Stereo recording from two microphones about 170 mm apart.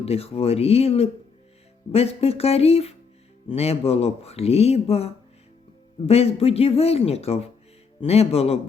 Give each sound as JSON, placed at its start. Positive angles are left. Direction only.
{"t": 0.0, "sound": "speech", "side_deg": 35}